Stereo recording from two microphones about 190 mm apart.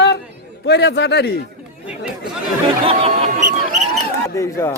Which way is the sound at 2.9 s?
30° right (ahead or behind).